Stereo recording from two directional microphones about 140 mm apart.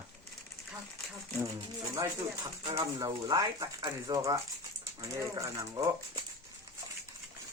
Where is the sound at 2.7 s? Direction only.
25° right (ahead or behind).